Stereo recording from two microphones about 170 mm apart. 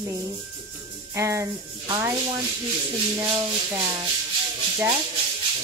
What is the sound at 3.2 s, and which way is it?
Rub, 25° right (ahead or behind).